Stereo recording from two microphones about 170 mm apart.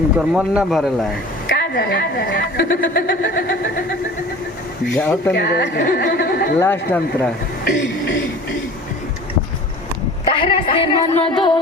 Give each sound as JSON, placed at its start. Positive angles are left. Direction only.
{"t": 0.2, "sound": "speech", "side_deg": -5}
{"t": 1.5, "sound": "a woman's voice", "side_deg": 80}
{"t": 4.9, "sound": "speech", "side_deg": 5}
{"t": 5.3, "sound": "a woman's voice", "side_deg": 70}
{"t": 5.7, "sound": "speech", "side_deg": 50}
{"t": 6.6, "sound": "speech", "side_deg": 15}
{"t": 7.6, "sound": "a sound", "side_deg": 90}
{"t": 10.2, "sound": "speech", "side_deg": 30}